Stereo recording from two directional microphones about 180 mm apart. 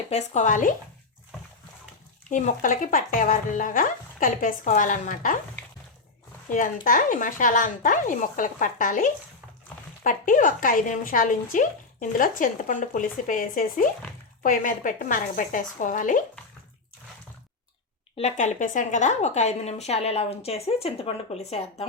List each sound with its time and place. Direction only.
0.1 s speech: 40° left (ahead or behind)
2.3 s speech: 45° left (ahead or behind)
6.5 s speech: 50° left (ahead or behind)
18.2 s a woman's voice: 40° left (ahead or behind)